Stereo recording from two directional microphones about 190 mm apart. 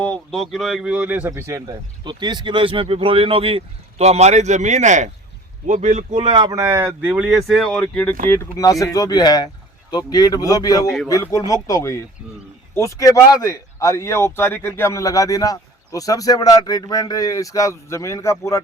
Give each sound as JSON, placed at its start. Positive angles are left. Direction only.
{"t": 0.0, "sound": "speech", "side_deg": 5}
{"t": 8.3, "sound": "speech", "side_deg": 20}